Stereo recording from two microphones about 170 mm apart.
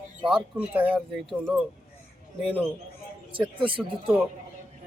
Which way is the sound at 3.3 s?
30° right (ahead or behind).